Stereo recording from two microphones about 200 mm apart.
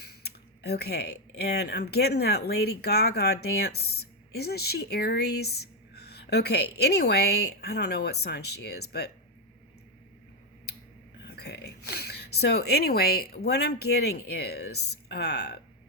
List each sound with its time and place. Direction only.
0.0 s speech: 55° left (ahead or behind)
11.3 s speech: 55° left (ahead or behind)